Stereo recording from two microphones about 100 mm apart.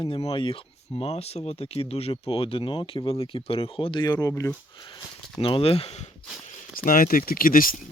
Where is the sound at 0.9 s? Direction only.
85° left; by 4.0 s 65° left (ahead or behind).